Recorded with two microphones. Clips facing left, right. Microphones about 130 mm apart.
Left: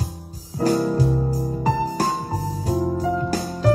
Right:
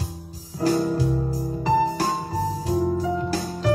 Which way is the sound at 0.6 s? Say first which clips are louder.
Left 2 dB; 40° left (ahead or behind).